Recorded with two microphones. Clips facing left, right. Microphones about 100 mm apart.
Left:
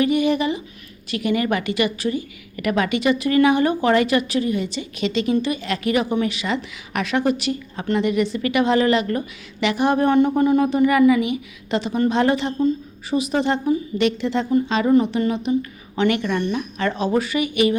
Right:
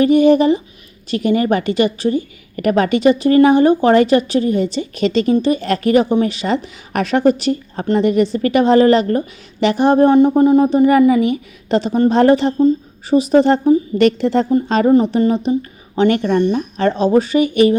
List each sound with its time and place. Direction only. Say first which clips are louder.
0.0 s a woman's voice: right 8 dB; 35° right (ahead or behind)